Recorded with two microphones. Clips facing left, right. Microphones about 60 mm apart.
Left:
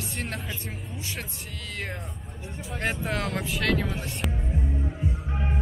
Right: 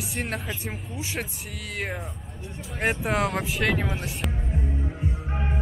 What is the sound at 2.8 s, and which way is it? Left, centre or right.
Speech, centre.